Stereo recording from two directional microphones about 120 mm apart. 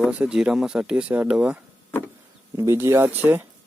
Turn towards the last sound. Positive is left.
turn(degrees=-15)  # may be behind; listen again after turning